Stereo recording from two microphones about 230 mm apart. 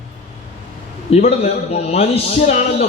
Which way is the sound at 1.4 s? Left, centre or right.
Left.